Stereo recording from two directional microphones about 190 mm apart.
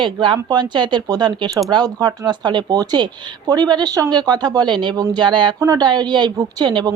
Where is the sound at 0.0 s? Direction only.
25° right (ahead or behind).